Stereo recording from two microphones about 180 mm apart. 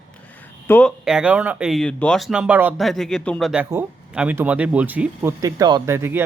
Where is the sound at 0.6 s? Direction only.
10° left (ahead or behind).